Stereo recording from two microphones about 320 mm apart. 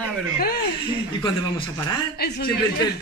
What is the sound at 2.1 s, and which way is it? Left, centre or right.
Speech, left.